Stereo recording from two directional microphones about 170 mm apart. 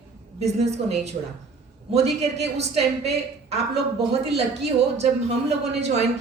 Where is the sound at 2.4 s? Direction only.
40° right (ahead or behind).